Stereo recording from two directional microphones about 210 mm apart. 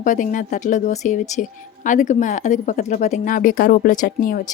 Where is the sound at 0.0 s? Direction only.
40° left (ahead or behind).